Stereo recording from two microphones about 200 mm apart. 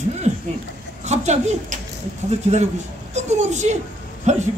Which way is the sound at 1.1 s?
35° right (ahead or behind).